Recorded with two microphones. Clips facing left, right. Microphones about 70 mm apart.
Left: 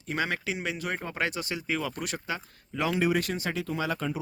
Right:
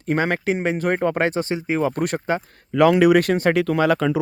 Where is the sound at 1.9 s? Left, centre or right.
Right.